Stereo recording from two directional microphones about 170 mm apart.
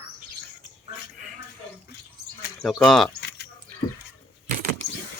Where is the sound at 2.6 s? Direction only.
Centre (ahead or behind).